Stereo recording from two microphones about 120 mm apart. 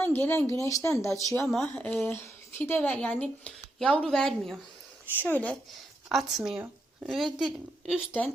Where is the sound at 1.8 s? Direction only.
20° left (ahead or behind).